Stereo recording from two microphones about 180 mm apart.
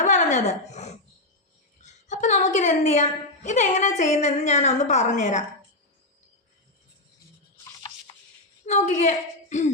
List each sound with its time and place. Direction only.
0.0 s a sound: 45° left (ahead or behind)
1.8 s a woman's voice: 40° left (ahead or behind)
8.6 s a woman's voice: 40° left (ahead or behind)